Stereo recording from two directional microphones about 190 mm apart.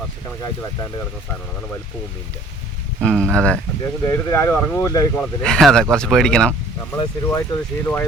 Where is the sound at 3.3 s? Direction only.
5° left (ahead or behind).